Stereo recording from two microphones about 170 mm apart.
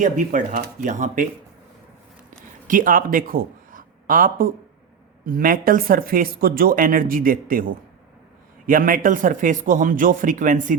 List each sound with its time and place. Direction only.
0.0 s speech: 50° right (ahead or behind)
2.6 s speech: 55° right (ahead or behind)